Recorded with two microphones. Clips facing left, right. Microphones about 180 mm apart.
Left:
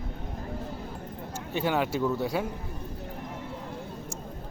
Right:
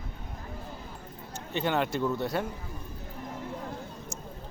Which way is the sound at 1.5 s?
5° left (ahead or behind).